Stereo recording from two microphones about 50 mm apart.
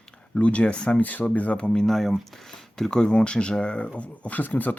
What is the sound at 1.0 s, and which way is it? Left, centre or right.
Speech, left.